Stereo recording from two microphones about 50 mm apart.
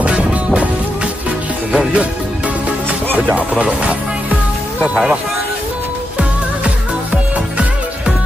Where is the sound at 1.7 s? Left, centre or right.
Right.